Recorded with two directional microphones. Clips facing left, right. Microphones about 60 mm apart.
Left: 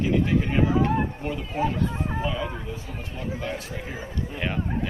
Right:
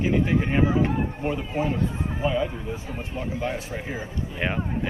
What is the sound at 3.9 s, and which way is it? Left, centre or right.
Speech, right.